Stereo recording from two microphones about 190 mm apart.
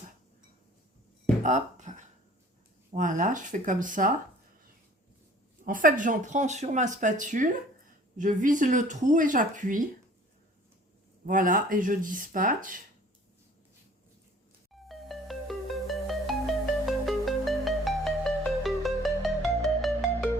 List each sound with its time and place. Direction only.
1.4 s a sound: 40° right (ahead or behind)
2.9 s speech: 45° right (ahead or behind)
5.6 s speech: 45° right (ahead or behind)
11.3 s speech: 45° right (ahead or behind)
14.8 s music: centre (ahead or behind)